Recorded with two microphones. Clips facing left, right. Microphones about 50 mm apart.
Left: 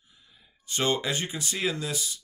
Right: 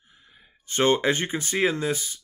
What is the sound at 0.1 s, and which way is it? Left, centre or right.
Speech, right.